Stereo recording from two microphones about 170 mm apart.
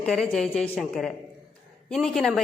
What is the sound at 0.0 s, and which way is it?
A woman's voice, 5° left (ahead or behind).